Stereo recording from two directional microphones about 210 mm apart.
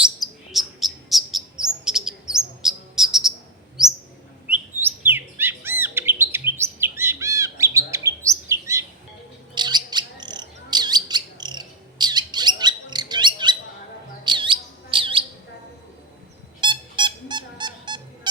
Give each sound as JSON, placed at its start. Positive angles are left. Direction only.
{"t": 0.0, "sound": "chirp", "side_deg": 0}
{"t": 4.5, "sound": "chirp", "side_deg": -10}
{"t": 9.6, "sound": "bird", "side_deg": -20}
{"t": 16.6, "sound": "squeak", "side_deg": -20}